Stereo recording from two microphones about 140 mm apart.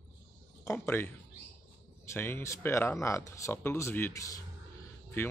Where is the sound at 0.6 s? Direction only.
15° left (ahead or behind).